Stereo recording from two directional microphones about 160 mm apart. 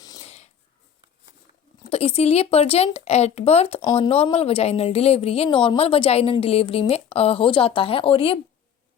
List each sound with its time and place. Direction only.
0.2 s a sound: 40° left (ahead or behind)
1.9 s a woman's voice: 40° left (ahead or behind)
3.8 s a woman's voice: 25° left (ahead or behind)